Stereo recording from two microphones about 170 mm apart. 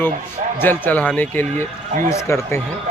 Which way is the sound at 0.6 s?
10° left (ahead or behind).